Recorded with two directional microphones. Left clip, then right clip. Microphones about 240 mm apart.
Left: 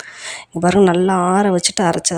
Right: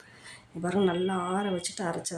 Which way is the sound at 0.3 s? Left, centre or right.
Left.